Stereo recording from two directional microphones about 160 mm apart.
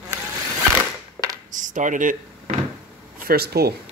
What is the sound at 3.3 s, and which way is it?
Speech, 75° right (ahead or behind).